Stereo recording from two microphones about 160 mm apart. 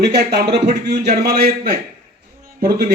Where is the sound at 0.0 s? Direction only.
90° right.